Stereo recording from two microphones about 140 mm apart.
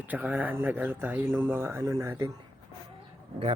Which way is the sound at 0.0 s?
10° right (ahead or behind).